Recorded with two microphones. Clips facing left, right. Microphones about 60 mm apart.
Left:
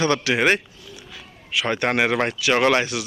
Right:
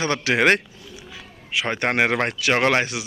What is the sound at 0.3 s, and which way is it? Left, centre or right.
Speech, right.